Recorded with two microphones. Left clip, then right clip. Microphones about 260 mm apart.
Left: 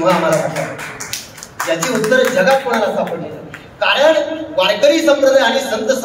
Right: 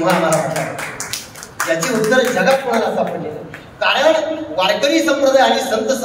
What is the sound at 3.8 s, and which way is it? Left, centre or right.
A man's voice, centre.